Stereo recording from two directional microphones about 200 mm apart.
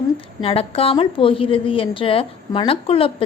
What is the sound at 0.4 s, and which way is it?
A woman's voice, 30° left (ahead or behind).